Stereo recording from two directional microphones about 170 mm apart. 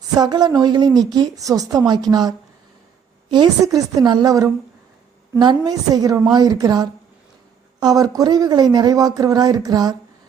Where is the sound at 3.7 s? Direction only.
25° right (ahead or behind).